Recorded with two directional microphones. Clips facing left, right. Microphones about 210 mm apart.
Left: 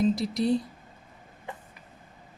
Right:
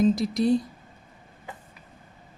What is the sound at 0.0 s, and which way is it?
Speech, 45° right (ahead or behind).